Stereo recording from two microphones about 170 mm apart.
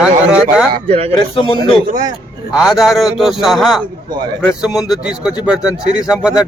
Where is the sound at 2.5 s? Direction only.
5° right (ahead or behind).